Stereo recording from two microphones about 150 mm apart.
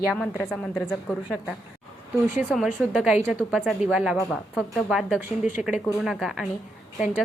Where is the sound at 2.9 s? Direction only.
5° right (ahead or behind).